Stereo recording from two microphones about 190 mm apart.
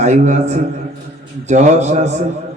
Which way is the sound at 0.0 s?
35° right (ahead or behind).